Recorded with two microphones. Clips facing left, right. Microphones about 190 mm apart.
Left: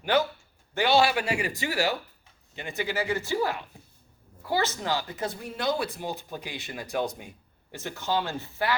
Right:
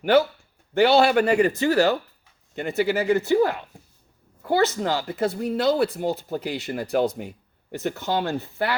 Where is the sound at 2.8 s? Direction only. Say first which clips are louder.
Right 7 dB; 20° right (ahead or behind).